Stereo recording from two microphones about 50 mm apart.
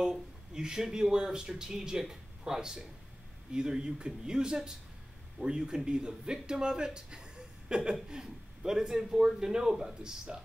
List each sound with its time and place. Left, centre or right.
0.0 s speech: centre